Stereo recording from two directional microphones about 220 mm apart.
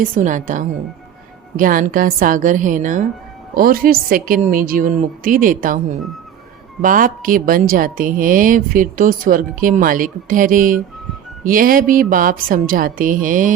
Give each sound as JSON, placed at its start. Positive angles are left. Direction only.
{"t": 0.0, "sound": "speech", "side_deg": -35}